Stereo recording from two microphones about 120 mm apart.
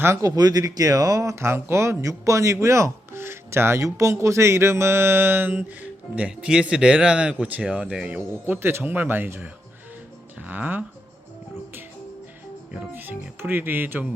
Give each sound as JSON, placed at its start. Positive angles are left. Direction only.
{"t": 0.0, "sound": "speech", "side_deg": -25}
{"t": 12.9, "sound": "speech", "side_deg": -15}